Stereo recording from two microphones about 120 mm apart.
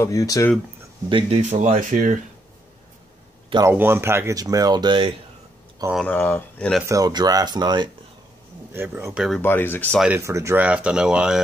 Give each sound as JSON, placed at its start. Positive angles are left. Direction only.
{"t": 0.0, "sound": "speech", "side_deg": 30}
{"t": 1.0, "sound": "speech", "side_deg": -45}
{"t": 1.4, "sound": "speech", "side_deg": -70}
{"t": 3.6, "sound": "speech", "side_deg": -20}
{"t": 4.4, "sound": "speech", "side_deg": -30}
{"t": 6.0, "sound": "speech", "side_deg": 15}
{"t": 6.9, "sound": "speech", "side_deg": -35}
{"t": 8.7, "sound": "speech", "side_deg": -20}
{"t": 9.4, "sound": "speech", "side_deg": 15}
{"t": 10.1, "sound": "speech", "side_deg": -25}
{"t": 10.6, "sound": "speech", "side_deg": -10}